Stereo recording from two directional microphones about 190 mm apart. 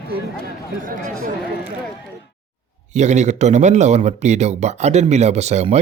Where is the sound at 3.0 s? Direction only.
35° right (ahead or behind).